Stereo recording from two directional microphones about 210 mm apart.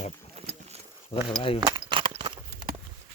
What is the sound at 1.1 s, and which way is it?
Speech, 25° left (ahead or behind).